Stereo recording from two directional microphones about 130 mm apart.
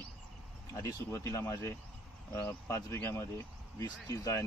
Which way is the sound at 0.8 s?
25° left (ahead or behind).